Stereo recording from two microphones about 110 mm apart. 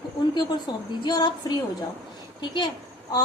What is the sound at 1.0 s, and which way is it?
Speech, 40° left (ahead or behind).